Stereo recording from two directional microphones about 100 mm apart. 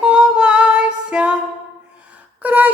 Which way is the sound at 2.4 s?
15° right (ahead or behind).